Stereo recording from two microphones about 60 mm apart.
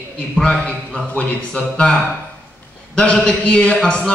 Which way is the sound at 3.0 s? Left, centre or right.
Centre.